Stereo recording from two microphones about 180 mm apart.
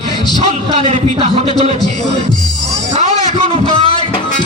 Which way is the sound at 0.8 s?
40° right (ahead or behind).